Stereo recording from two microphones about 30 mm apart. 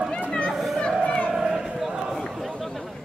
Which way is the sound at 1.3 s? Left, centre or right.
Centre.